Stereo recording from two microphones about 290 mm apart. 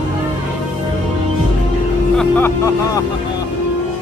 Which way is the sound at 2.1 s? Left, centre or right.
Centre.